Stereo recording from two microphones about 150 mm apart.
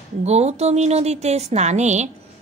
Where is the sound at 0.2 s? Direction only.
45° right (ahead or behind).